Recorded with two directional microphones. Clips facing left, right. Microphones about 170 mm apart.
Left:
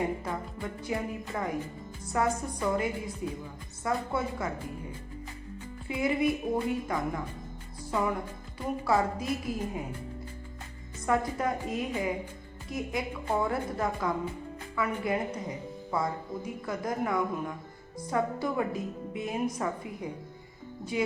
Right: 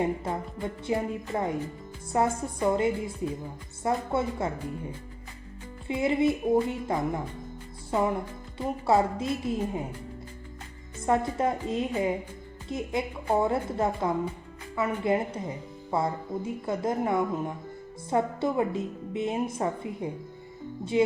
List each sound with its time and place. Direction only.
0.3 s a woman's voice: 25° right (ahead or behind)
5.9 s a woman's voice: 25° right (ahead or behind)
11.0 s a woman's voice: 25° right (ahead or behind)